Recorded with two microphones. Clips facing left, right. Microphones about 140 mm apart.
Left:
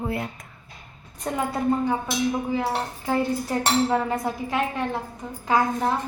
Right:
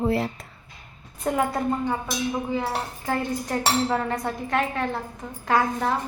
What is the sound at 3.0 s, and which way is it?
Cutlery, 10° left (ahead or behind).